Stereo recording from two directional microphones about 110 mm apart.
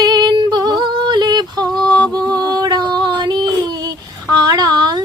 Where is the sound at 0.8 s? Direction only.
45° right (ahead or behind).